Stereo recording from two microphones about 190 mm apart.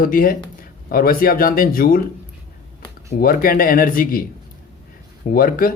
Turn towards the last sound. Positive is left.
turn(degrees=50)  # may be behind; listen again after turning